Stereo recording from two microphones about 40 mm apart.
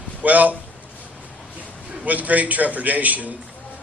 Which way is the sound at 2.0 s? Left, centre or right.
Right.